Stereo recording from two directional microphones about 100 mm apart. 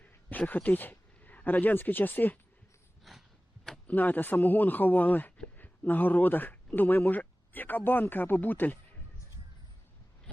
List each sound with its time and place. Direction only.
0.0 s speech: 15° left (ahead or behind)
3.0 s a sound: centre (ahead or behind)
3.8 s a man's voice: 15° left (ahead or behind)